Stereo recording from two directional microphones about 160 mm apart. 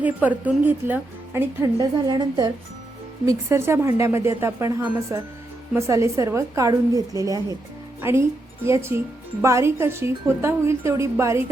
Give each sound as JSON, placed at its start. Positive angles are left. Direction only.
{"t": 0.0, "sound": "a woman's voice", "side_deg": -10}
{"t": 8.6, "sound": "a woman's voice", "side_deg": -15}